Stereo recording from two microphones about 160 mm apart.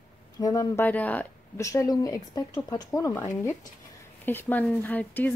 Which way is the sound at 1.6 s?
20° left (ahead or behind).